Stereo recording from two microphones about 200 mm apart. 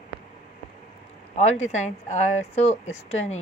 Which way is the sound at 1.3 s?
35° left (ahead or behind).